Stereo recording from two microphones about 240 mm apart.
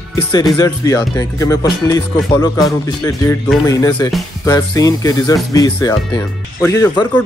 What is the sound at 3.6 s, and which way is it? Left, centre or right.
Speech, centre.